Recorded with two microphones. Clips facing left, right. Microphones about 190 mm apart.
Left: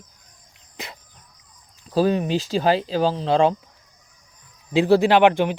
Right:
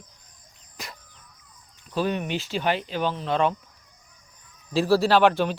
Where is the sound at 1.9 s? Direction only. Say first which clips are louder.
Left 6 dB; 35° left (ahead or behind).